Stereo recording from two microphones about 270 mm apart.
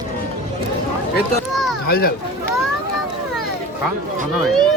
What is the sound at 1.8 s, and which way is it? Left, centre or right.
Speech, left.